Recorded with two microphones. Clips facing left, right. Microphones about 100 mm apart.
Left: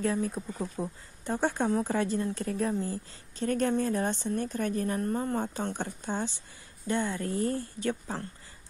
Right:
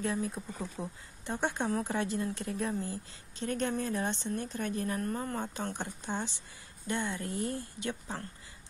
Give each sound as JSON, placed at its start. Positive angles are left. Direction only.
{"t": 0.0, "sound": "a woman's voice", "side_deg": 40}
{"t": 1.7, "sound": "speech", "side_deg": 25}
{"t": 2.0, "sound": "a woman's voice", "side_deg": 40}
{"t": 5.0, "sound": "a woman's voice", "side_deg": 25}